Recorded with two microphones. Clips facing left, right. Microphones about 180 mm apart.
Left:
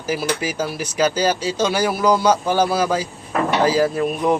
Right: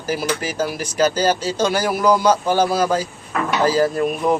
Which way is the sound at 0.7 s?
10° left (ahead or behind).